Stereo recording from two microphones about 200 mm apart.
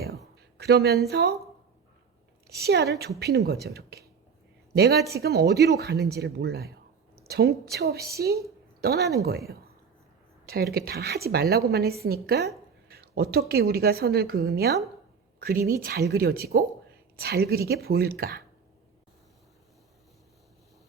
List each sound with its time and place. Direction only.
0.6 s a woman's voice: 55° right (ahead or behind)
2.6 s a woman's voice: 55° right (ahead or behind)
10.4 s a woman's voice: 50° right (ahead or behind)